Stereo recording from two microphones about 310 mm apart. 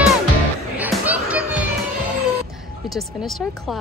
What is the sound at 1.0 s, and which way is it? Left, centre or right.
Music, centre.